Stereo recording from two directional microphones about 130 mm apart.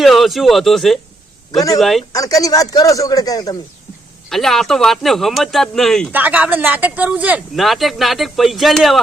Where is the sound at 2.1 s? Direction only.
25° left (ahead or behind).